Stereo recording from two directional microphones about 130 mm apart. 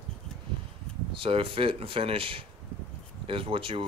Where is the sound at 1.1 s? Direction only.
40° right (ahead or behind).